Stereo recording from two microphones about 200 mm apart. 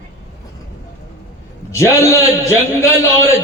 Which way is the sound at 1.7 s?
15° left (ahead or behind).